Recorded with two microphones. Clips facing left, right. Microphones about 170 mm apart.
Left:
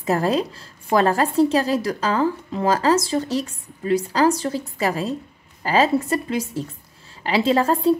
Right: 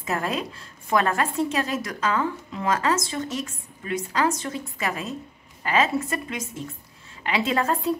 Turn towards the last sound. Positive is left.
turn(degrees=30)  # may be behind; listen again after turning